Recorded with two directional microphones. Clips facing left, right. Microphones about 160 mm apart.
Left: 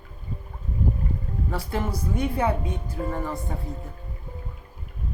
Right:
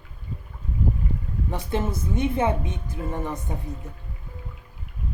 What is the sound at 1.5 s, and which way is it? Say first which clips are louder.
Speech: right 2 dB; 20° right (ahead or behind).